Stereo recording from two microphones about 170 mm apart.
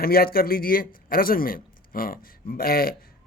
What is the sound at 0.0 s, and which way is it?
Speech, 60° left (ahead or behind).